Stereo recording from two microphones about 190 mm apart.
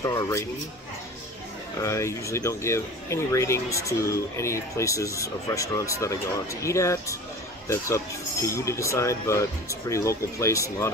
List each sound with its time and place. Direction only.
0.0 s speech: 15° left (ahead or behind)
1.8 s speech: 15° left (ahead or behind)